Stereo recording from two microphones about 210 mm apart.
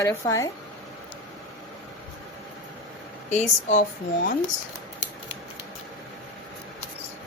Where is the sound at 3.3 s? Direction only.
35° left (ahead or behind).